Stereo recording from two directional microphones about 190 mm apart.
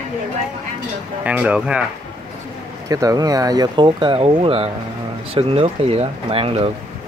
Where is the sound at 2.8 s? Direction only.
20° right (ahead or behind).